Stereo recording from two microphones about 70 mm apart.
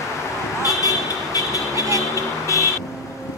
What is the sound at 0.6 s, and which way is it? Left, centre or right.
Vehicle, left.